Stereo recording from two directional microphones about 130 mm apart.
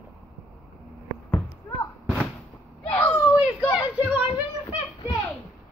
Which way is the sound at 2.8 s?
10° left (ahead or behind).